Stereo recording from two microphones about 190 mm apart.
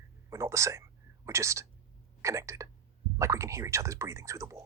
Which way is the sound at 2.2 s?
15° right (ahead or behind).